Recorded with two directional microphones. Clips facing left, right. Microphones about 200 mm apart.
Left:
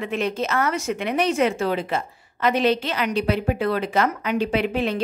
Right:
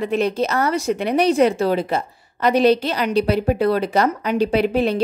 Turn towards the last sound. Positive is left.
turn(degrees=-35)  # may be behind; listen again after turning